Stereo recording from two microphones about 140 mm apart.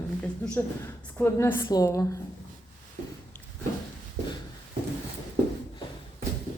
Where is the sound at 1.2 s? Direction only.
15° left (ahead or behind).